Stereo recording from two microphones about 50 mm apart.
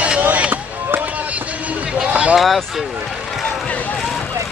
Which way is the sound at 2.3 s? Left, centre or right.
Centre.